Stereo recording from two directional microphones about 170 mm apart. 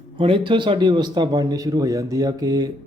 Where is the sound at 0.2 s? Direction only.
30° right (ahead or behind).